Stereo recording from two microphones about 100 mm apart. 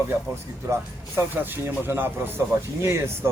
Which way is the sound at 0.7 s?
25° right (ahead or behind).